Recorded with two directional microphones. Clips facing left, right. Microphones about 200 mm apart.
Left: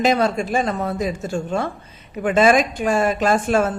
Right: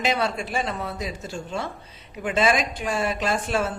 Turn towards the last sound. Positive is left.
turn(degrees=50)  # may be behind; listen again after turning